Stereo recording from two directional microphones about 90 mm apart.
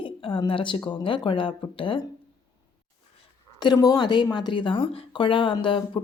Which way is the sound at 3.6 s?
50° left (ahead or behind).